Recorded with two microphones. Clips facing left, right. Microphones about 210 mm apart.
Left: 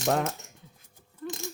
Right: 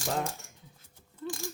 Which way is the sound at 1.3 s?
20° left (ahead or behind).